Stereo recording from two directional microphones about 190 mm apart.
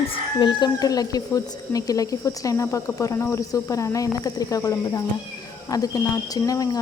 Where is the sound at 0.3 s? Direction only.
25° left (ahead or behind).